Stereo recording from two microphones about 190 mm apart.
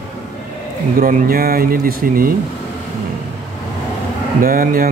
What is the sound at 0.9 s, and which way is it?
Mantra, 50° right (ahead or behind).